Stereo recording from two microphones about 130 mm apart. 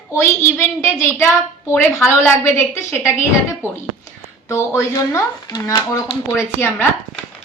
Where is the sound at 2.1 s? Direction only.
20° left (ahead or behind).